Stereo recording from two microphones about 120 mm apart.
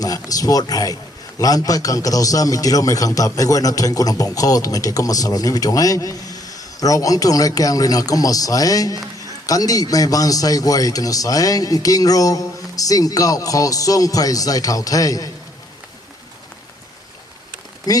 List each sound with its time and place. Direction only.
0.0 s a man's voice: 30° left (ahead or behind)
17.9 s speech: 30° left (ahead or behind)